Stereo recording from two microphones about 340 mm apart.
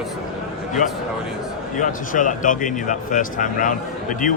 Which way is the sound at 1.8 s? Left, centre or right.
Left.